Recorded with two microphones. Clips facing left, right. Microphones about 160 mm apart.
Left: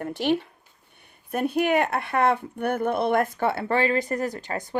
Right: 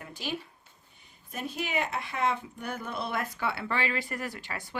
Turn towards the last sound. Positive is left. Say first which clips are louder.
# left 9 dB
turn(degrees=40)  # may be behind; listen again after turning